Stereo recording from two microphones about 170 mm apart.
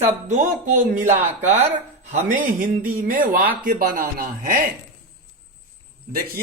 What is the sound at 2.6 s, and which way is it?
Speech, 55° right (ahead or behind).